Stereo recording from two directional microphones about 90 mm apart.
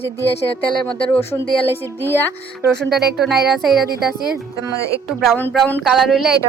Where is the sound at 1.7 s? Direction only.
25° left (ahead or behind).